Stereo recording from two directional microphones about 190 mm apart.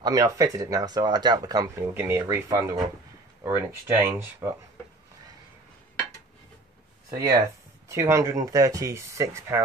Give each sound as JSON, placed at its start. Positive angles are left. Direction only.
{"t": 0.0, "sound": "speech", "side_deg": -15}
{"t": 7.1, "sound": "speech", "side_deg": -15}